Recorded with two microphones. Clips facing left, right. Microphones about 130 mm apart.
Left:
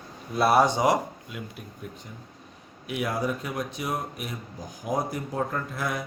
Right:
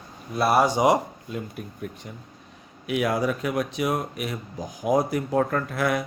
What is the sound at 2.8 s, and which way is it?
Speech, 90° right.